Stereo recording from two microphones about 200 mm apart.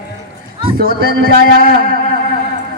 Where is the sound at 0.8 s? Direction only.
50° right (ahead or behind).